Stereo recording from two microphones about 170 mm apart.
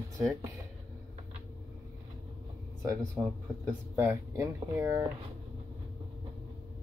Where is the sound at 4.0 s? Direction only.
15° right (ahead or behind).